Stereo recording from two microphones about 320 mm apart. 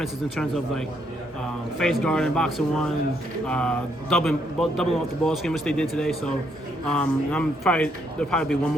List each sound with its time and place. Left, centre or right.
0.0 s speech: centre
1.8 s speech: centre